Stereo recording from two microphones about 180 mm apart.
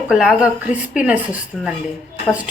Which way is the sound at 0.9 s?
5° right (ahead or behind).